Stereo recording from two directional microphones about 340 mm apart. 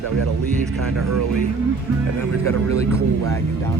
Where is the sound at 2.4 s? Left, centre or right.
Centre.